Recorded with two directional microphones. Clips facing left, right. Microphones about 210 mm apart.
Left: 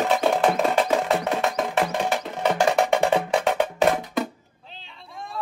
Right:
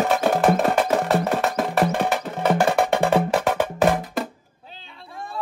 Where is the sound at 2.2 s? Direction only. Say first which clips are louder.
Right 2 dB; 55° right (ahead or behind).